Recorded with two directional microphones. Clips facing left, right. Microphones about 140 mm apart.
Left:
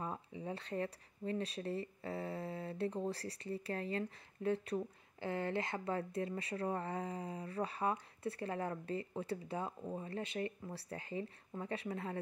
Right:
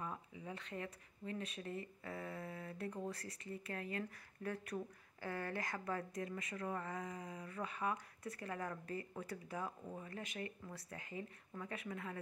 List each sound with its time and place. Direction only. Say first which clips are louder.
0.0 s speech: left 4 dB; 30° left (ahead or behind)